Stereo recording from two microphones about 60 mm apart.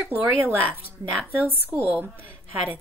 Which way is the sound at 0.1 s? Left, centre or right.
Right.